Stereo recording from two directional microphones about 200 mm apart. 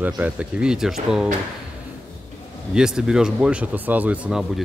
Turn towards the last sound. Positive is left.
turn(degrees=-5)  # may be behind; listen again after turning